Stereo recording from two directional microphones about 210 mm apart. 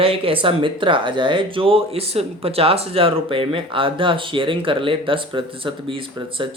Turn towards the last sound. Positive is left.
turn(degrees=-25)  # may be behind; listen again after turning